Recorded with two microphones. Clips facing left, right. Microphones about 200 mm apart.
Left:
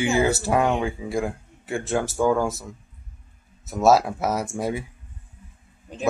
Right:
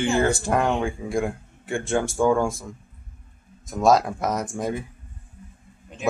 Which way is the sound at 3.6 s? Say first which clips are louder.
Left 1 dB; 5° left (ahead or behind).